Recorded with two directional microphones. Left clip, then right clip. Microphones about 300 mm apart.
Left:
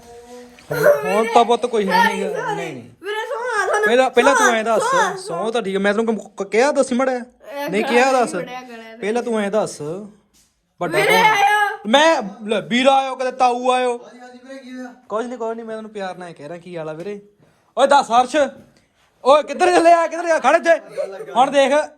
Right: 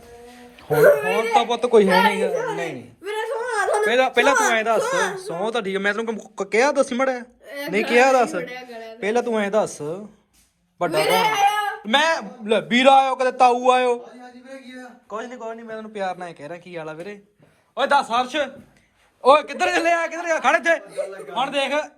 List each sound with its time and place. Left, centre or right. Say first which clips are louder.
1.1 s speech: left 5 dB; centre
3.4 s a sound: left 3 dB; centre
4.4 s speech: left 3 dB; centre
11.3 s a sound: left 4 dB; left
11.9 s a man's voice: left 5 dB; centre
12.5 s speech: right 1 dB; centre
15.1 s a man's voice: left 7 dB; centre